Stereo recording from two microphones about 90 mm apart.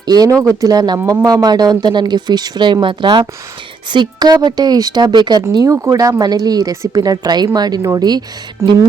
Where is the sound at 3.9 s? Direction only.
55° right (ahead or behind).